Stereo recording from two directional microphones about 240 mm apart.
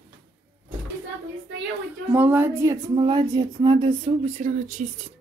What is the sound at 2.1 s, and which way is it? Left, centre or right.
Speech, centre.